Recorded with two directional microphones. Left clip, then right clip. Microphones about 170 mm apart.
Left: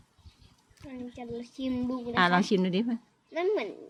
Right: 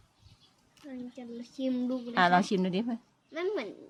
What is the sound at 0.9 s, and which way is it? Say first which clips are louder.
Speech: left 4 dB; 90° right.